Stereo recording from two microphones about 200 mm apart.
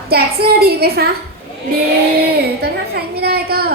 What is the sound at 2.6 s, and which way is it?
A woman's voice, 50° right (ahead or behind).